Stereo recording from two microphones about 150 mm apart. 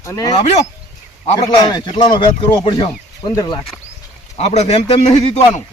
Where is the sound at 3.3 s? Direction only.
25° left (ahead or behind).